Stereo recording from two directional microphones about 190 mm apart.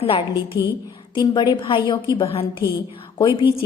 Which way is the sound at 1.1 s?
20° left (ahead or behind).